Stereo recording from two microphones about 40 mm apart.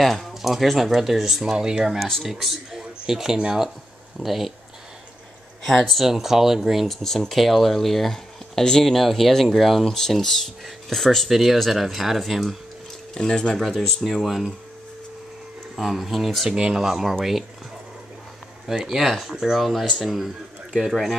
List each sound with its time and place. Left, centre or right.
0.0 s speech: centre
5.6 s speech: centre
6.0 s speech: centre
7.0 s speech: centre
11.2 s speech: centre
15.7 s speech: centre
16.4 s speech: centre
18.9 s speech: centre
19.6 s speech: centre